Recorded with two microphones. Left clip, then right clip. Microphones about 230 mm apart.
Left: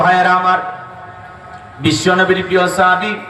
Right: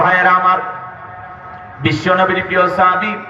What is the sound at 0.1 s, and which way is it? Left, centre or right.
Speech, left.